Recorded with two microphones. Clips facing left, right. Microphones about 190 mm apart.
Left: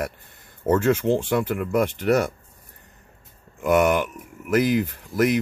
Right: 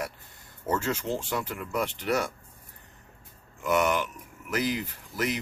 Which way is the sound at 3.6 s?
50° left (ahead or behind).